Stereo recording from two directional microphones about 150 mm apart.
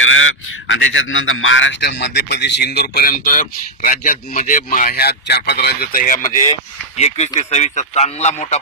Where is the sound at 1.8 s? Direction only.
90° left; by 6.4 s 60° left (ahead or behind).